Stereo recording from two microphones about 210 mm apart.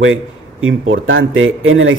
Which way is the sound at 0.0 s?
70° right (ahead or behind).